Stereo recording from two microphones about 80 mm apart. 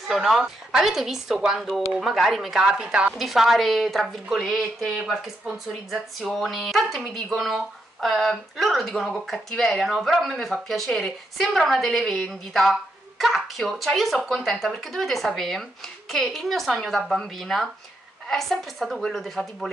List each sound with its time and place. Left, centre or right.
0.1 s speech: centre
3.2 s speech: centre